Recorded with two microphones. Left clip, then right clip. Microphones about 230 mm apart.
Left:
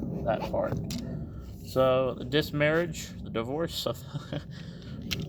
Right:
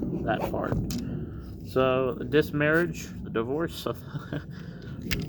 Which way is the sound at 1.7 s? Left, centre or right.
Left.